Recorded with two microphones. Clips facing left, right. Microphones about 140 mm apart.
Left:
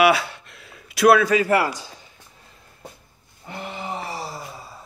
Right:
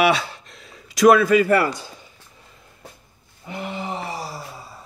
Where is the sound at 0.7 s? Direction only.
35° right (ahead or behind).